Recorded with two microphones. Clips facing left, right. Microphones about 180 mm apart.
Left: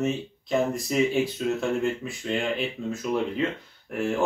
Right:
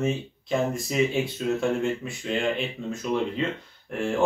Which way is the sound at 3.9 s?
5° left (ahead or behind).